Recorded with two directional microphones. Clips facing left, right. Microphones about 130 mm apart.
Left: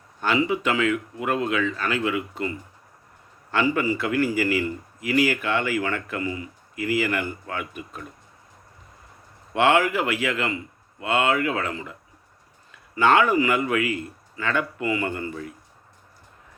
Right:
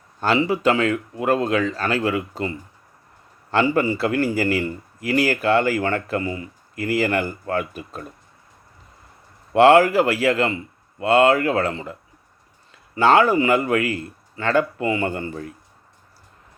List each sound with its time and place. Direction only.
0.2 s speech: 35° right (ahead or behind)
9.6 s speech: 40° right (ahead or behind)
13.0 s speech: 35° right (ahead or behind)